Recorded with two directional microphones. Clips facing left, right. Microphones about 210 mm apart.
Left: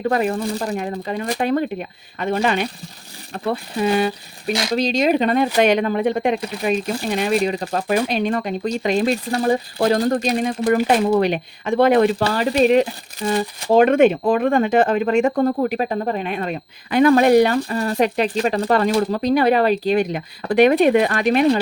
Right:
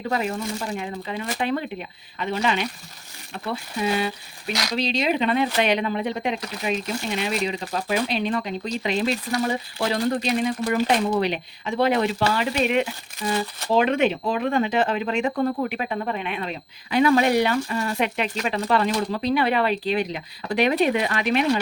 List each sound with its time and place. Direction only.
0.1 s speech: 50° left (ahead or behind)
0.3 s speech: 35° left (ahead or behind)
9.3 s speech: 35° left (ahead or behind); by 12.1 s 55° left (ahead or behind)
12.2 s speech: 40° left (ahead or behind)